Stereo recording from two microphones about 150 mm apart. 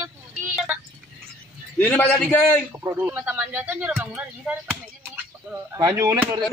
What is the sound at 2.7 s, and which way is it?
Speech, 15° right (ahead or behind).